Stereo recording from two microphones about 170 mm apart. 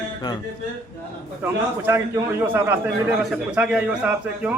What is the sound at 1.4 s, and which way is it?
A man's voice, 15° right (ahead or behind).